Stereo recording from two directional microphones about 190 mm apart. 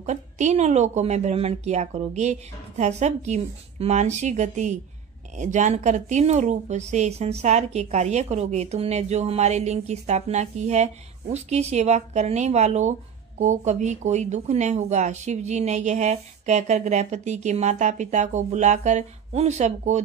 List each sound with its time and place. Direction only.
0.0 s speech: 40° right (ahead or behind)